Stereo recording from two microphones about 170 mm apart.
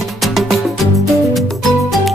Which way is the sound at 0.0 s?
Centre (ahead or behind).